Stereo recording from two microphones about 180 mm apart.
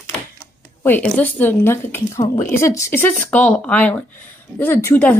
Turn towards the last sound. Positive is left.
turn(degrees=15)  # may be behind; listen again after turning